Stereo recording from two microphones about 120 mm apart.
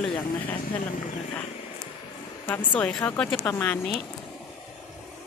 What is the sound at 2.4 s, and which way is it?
A woman's voice, 15° left (ahead or behind).